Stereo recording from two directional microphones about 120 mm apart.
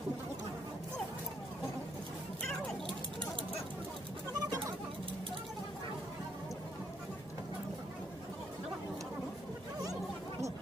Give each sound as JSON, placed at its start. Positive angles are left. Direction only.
{"t": 4.3, "sound": "bird", "side_deg": -30}